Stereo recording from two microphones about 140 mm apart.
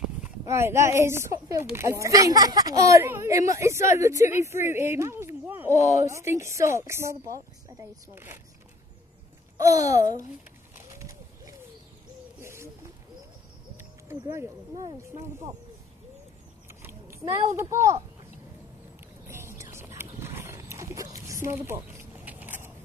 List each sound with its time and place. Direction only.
0.5 s a woman's voice: 20° right (ahead or behind)
9.6 s a woman's voice: 25° right (ahead or behind)
9.9 s a child's voice: 65° left (ahead or behind)
11.0 s a sound: 25° right (ahead or behind)
12.4 s bird: 20° right (ahead or behind)
14.0 s a woman's voice: 20° right (ahead or behind)
16.6 s a sound: 20° right (ahead or behind)
17.6 s a woman's voice: 20° right (ahead or behind)
19.2 s wild animals: 20° right (ahead or behind)
21.3 s a sound: 20° right (ahead or behind)